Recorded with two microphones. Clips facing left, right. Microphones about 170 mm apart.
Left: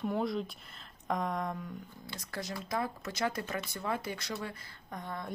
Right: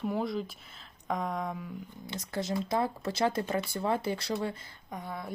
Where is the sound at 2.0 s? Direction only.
20° right (ahead or behind).